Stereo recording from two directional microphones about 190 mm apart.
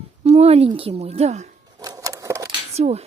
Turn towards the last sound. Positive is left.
turn(degrees=-35)  # may be behind; listen again after turning